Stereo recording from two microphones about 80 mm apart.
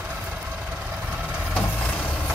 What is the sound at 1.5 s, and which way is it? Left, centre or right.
Vehicle, centre.